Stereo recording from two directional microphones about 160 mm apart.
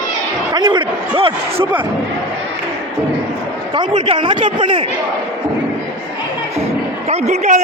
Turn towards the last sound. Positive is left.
turn(degrees=-45)  # may be behind; listen again after turning